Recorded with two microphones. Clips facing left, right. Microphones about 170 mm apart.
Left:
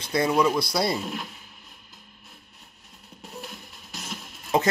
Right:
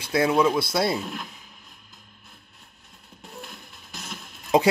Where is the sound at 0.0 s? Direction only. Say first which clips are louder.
Right 1 dB; 5° right (ahead or behind).